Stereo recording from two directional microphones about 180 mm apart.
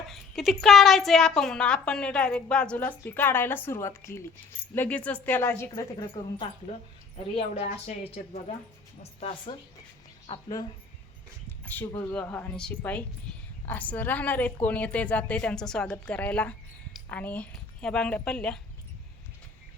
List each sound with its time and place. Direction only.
0.1 s a woman's voice: centre (ahead or behind); by 6.3 s 20° left (ahead or behind)
7.3 s speech: 35° left (ahead or behind)
9.2 s a woman's voice: 30° left (ahead or behind)
11.4 s a woman's voice: 10° left (ahead or behind)